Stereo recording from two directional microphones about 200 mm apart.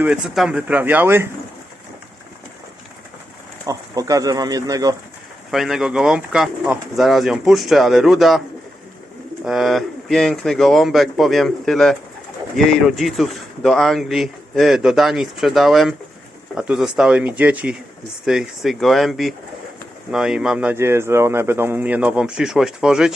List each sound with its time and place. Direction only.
0.0 s speech: 5° right (ahead or behind)
3.7 s speech: 15° right (ahead or behind)
5.5 s speech: centre (ahead or behind)
9.4 s speech: centre (ahead or behind)